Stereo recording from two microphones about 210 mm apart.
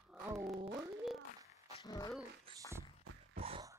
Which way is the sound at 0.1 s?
Centre (ahead or behind).